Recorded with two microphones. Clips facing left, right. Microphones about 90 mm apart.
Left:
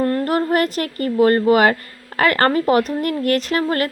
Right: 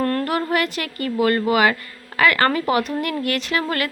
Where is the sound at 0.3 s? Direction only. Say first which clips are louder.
Left 4 dB; 40° left (ahead or behind).